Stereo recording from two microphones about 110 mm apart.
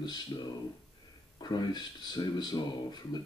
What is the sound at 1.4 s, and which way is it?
Speech, 40° left (ahead or behind).